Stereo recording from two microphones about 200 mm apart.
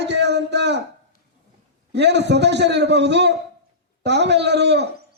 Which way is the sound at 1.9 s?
60° right (ahead or behind).